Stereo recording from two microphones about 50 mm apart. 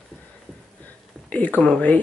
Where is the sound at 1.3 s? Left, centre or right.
Left.